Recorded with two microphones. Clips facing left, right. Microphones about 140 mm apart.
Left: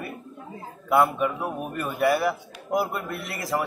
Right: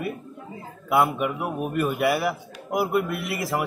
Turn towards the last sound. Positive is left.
turn(degrees=-10)  # may be behind; listen again after turning